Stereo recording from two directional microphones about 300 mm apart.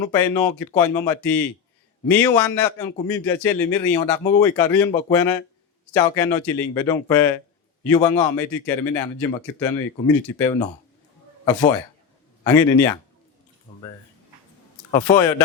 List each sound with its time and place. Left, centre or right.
0.0 s speech: centre
14.9 s speech: centre